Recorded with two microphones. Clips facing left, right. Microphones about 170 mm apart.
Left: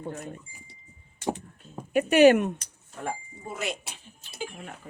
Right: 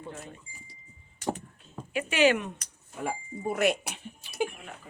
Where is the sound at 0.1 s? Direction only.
45° left (ahead or behind).